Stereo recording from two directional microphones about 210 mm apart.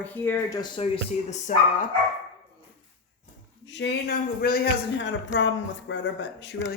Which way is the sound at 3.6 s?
60° left (ahead or behind).